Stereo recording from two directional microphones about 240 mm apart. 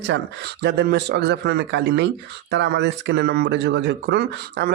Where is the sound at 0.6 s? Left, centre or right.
Right.